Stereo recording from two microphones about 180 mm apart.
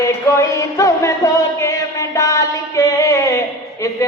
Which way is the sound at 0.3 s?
15° left (ahead or behind).